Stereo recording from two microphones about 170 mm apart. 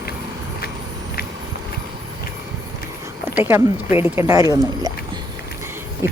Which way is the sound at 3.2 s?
15° right (ahead or behind).